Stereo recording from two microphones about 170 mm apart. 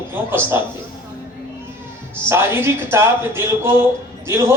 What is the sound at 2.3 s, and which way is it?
A man's voice, 15° right (ahead or behind).